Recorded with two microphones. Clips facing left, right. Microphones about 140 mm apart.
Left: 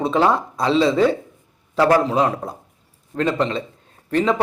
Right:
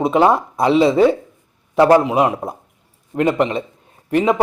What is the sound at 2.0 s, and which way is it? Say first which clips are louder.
A man's voice: right 3 dB; 15° right (ahead or behind).